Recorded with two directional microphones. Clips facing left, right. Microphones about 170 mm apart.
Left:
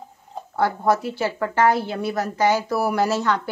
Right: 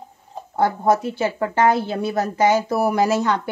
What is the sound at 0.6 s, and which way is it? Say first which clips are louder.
A woman's voice: right 2 dB; 20° right (ahead or behind).